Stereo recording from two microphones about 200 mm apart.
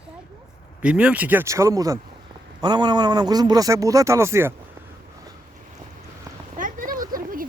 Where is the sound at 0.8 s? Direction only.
5° right (ahead or behind).